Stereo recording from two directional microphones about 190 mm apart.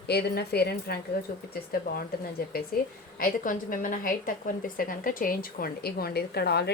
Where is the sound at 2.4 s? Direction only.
50° left (ahead or behind).